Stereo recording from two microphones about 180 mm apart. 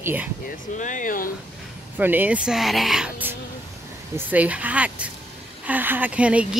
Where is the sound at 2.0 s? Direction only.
10° right (ahead or behind).